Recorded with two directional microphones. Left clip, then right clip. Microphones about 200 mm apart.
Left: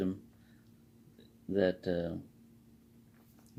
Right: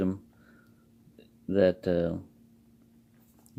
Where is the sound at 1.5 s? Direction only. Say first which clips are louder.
Right 7 dB; 45° right (ahead or behind).